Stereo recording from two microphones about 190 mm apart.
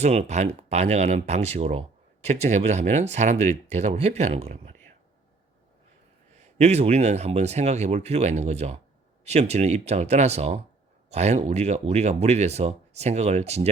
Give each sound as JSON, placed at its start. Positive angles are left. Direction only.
{"t": 0.0, "sound": "speech", "side_deg": -35}
{"t": 6.3, "sound": "speech", "side_deg": -35}